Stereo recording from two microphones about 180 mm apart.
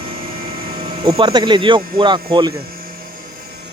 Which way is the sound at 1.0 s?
25° right (ahead or behind).